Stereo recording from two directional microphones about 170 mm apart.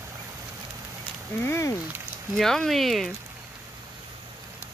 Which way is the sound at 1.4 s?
15° left (ahead or behind).